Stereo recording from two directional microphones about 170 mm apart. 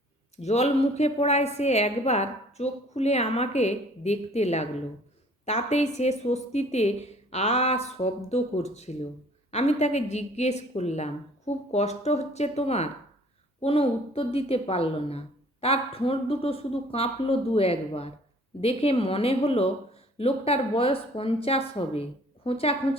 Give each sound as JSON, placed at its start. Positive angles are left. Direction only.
{"t": 0.3, "sound": "a woman's voice", "side_deg": 40}